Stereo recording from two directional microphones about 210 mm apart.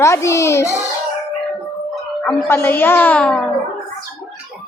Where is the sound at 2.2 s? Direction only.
10° left (ahead or behind).